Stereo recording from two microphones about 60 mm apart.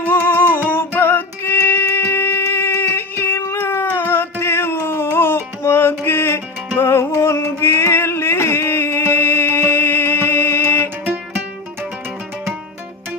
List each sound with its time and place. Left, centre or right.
0.0 s music: left